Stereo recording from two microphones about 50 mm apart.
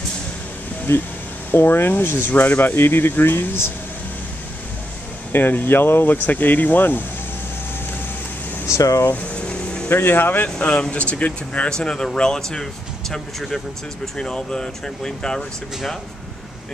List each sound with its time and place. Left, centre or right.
0.9 s speech: left
1.5 s speech: left
5.3 s speech: left
6.2 s speech: left
8.6 s speech: left
9.1 s a sound: left
9.8 s speech: left
11.7 s speech: centre